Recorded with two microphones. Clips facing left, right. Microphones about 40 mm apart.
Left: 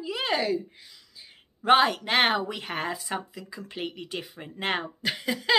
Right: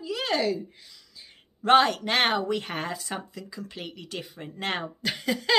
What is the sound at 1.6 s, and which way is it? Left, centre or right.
Speech, centre.